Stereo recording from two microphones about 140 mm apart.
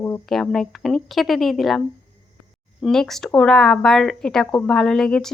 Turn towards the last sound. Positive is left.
turn(degrees=5)  # may be behind; listen again after turning